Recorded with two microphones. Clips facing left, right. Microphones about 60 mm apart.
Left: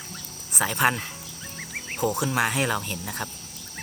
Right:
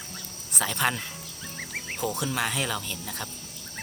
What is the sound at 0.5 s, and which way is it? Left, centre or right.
Speech, centre.